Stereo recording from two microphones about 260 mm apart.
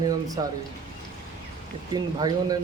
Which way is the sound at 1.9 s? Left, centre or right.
Centre.